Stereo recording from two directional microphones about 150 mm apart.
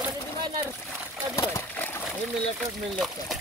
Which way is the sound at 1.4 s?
20° left (ahead or behind).